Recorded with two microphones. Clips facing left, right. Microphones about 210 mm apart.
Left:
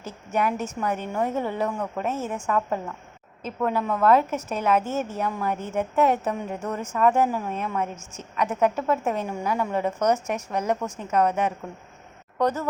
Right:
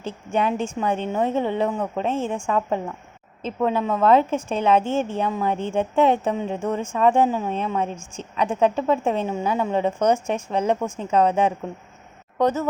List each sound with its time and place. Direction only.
0.0 s a woman's voice: 25° right (ahead or behind)